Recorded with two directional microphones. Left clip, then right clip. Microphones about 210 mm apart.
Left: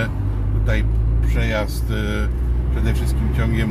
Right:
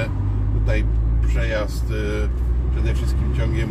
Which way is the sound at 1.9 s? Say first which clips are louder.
Left 1 dB; 15° left (ahead or behind).